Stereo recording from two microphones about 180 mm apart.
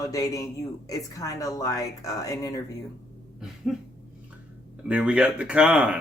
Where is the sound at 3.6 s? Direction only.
Centre (ahead or behind).